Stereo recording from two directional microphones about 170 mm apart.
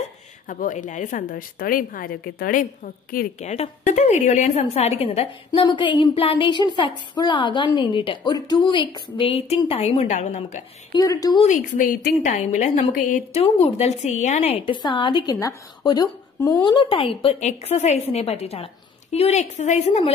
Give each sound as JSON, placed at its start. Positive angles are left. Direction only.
{"t": 0.5, "sound": "a woman's voice", "side_deg": 50}
{"t": 10.9, "sound": "a woman's voice", "side_deg": 20}
{"t": 11.4, "sound": "a woman's voice", "side_deg": 50}
{"t": 14.7, "sound": "a woman's voice", "side_deg": 30}